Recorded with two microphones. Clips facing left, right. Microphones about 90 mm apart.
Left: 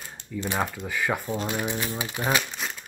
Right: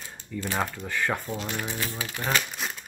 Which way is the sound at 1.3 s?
20° left (ahead or behind).